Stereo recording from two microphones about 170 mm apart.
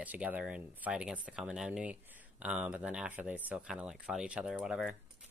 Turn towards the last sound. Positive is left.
turn(degrees=-5)  # may be behind; listen again after turning